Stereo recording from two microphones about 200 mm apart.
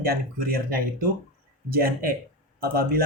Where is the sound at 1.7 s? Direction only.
50° right (ahead or behind).